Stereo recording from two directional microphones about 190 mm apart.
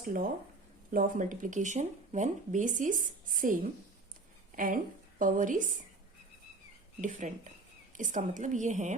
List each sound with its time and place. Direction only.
0.0 s speech: 45° right (ahead or behind)
7.0 s a woman's voice: 40° right (ahead or behind)